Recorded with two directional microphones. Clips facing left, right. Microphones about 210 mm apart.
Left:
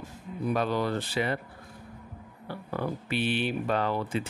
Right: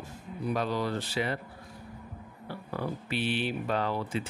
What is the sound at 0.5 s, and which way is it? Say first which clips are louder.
Speech: left 2 dB; 55° left (ahead or behind).